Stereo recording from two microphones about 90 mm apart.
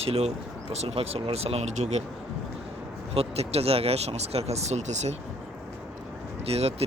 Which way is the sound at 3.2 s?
90° right.